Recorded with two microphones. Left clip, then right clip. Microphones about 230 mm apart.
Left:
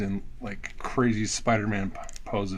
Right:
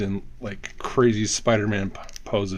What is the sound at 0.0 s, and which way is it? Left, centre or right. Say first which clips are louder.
Speech: right 4 dB; right.